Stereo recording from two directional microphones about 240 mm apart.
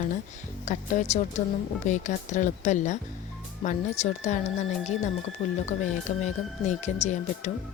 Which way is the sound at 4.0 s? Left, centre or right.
Left.